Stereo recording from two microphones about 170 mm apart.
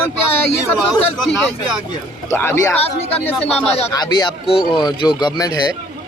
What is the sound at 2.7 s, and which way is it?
Speech, 35° left (ahead or behind).